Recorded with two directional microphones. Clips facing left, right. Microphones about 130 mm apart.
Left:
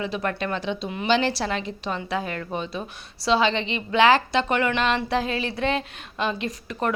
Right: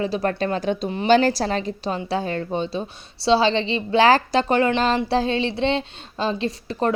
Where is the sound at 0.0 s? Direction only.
35° right (ahead or behind).